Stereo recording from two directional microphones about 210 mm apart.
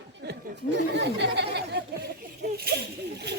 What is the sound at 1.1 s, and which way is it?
Speech, 55° right (ahead or behind).